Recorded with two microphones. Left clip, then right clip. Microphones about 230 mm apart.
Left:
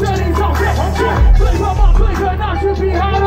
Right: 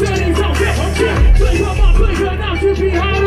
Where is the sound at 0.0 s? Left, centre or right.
Centre.